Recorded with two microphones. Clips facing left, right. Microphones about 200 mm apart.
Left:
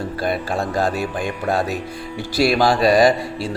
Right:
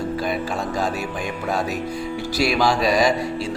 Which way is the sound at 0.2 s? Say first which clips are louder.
Left 2 dB; 55° left (ahead or behind).